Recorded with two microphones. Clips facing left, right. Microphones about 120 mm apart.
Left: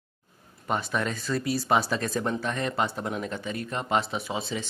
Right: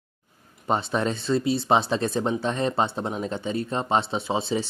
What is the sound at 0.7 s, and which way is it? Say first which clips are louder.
Speech: right 4 dB; 30° right (ahead or behind).